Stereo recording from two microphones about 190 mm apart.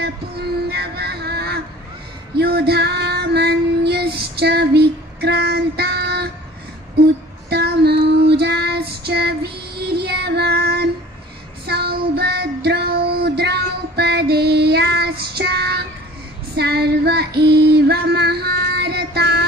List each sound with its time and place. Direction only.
0.7 s music: 55° right (ahead or behind)
2.3 s child singing: 55° right (ahead or behind)
7.0 s music: 60° right (ahead or behind)
7.4 s female singing: 60° right (ahead or behind)
11.6 s child singing: 55° right (ahead or behind)
16.5 s female singing: 60° right (ahead or behind)